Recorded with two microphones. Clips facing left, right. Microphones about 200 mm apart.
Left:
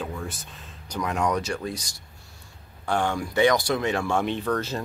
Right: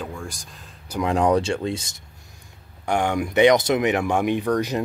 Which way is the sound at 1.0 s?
30° right (ahead or behind).